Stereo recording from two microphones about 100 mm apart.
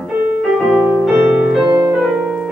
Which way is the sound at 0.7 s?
5° right (ahead or behind).